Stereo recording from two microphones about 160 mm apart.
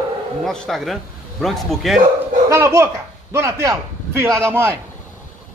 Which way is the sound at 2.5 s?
15° right (ahead or behind).